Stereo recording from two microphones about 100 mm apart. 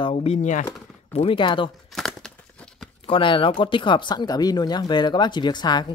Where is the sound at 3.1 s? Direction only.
60° left (ahead or behind).